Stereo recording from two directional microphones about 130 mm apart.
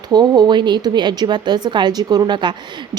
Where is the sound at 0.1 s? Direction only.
35° right (ahead or behind).